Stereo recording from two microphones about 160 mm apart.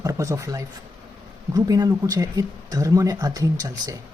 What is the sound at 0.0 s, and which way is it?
Speech, 20° right (ahead or behind).